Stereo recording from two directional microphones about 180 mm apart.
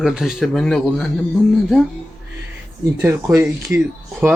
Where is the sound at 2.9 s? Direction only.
15° right (ahead or behind).